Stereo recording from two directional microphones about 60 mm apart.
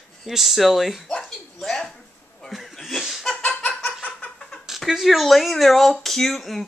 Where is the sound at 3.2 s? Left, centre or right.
Left.